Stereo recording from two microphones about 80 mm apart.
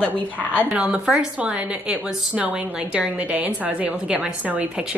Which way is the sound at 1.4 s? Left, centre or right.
Centre.